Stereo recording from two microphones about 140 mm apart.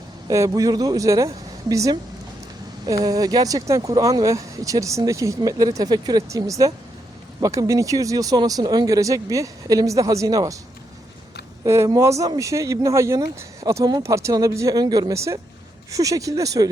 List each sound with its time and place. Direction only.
0.3 s speech: 25° right (ahead or behind)
11.6 s speech: 20° right (ahead or behind)